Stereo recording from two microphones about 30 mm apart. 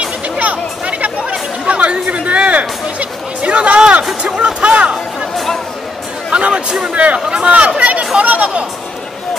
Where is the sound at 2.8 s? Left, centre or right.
Right.